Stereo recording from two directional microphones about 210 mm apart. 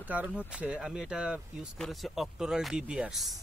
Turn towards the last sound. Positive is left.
turn(degrees=0)  # may be behind; listen again after turning